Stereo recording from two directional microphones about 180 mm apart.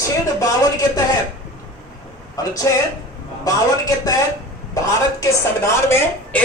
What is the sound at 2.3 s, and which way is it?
A man's voice, 20° left (ahead or behind).